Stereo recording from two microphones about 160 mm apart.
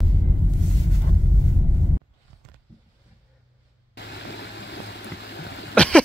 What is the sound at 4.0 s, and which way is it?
Stream, 90° left.